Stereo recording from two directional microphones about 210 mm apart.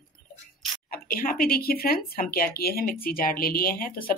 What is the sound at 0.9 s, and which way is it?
Speech, 40° left (ahead or behind).